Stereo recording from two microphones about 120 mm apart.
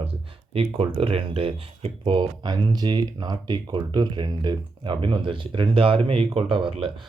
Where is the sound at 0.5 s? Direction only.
50° right (ahead or behind).